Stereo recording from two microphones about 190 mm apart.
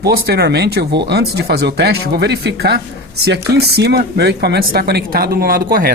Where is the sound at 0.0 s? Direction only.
55° right (ahead or behind).